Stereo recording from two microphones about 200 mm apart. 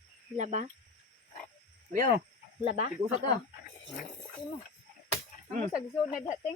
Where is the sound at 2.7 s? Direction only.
30° right (ahead or behind).